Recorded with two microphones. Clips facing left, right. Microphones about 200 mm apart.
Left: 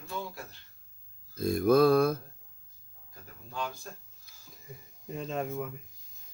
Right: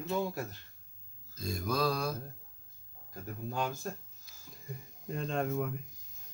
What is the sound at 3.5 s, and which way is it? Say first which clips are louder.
Speech: right 1 dB; 45° right (ahead or behind).